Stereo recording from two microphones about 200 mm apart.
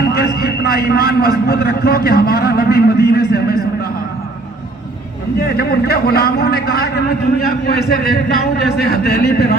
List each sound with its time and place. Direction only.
0.1 s a man's voice: 50° left (ahead or behind)
5.4 s a man's voice: 50° left (ahead or behind)